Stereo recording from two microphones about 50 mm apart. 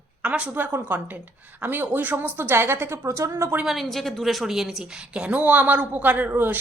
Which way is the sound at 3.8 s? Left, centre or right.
Centre.